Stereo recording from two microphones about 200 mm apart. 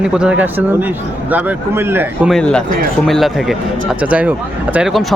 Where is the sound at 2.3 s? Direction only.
5° left (ahead or behind).